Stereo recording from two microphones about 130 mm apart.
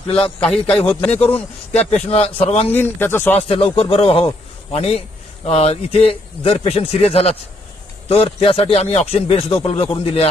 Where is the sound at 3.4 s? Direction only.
50° left (ahead or behind).